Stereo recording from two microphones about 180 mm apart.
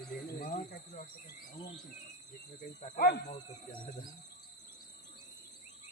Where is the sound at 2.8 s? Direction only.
50° left (ahead or behind).